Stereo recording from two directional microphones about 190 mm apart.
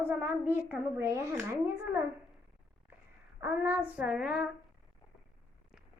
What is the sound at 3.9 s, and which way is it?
Child singing, 5° right (ahead or behind).